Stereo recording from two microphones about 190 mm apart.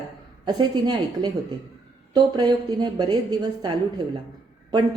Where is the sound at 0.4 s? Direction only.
20° right (ahead or behind).